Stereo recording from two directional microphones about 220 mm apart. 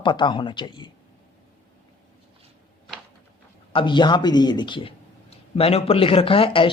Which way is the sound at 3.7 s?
20° left (ahead or behind).